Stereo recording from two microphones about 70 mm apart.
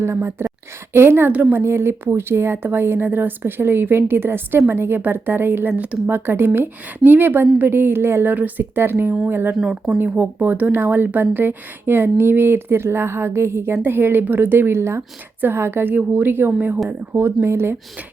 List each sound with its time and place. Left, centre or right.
0.0 s speech: right
1.3 s speech: right
1.5 s speech: right
6.1 s speech: right
9.6 s speech: centre
10.0 s speech: right
17.2 s speech: right